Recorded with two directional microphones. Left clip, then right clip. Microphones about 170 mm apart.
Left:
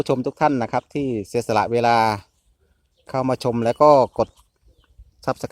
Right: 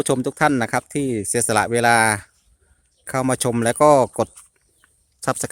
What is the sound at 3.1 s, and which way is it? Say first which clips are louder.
Speech: right 1 dB; 55° right (ahead or behind).